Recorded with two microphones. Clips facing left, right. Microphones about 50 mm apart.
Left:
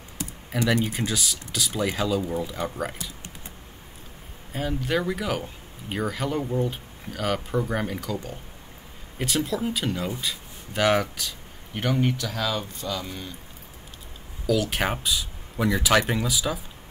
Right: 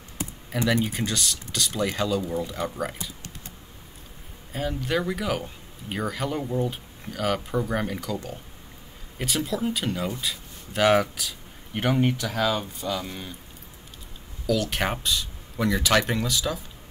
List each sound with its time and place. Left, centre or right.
0.5 s speech: centre
4.5 s speech: centre
10.2 s a sound: centre
11.8 s speech: centre
14.4 s speech: centre